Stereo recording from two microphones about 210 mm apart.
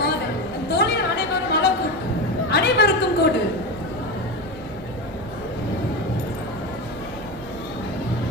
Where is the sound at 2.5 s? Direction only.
50° left (ahead or behind).